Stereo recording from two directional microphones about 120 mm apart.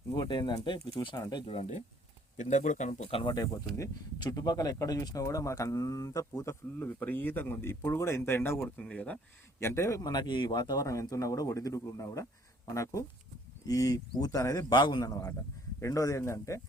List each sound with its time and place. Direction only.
0.1 s speech: 40° left (ahead or behind)
1.5 s speech: 70° left (ahead or behind)
2.4 s speech: 90° left
3.1 s speech: 50° left (ahead or behind)
3.8 s speech: 30° left (ahead or behind); by 9.1 s 10° left (ahead or behind)
9.6 s speech: 20° left (ahead or behind)
14.7 s speech: 40° left (ahead or behind); by 16.6 s 25° left (ahead or behind)